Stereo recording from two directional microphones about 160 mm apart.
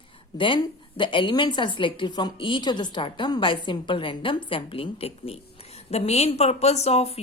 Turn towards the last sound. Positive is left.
turn(degrees=40)  # may be behind; listen again after turning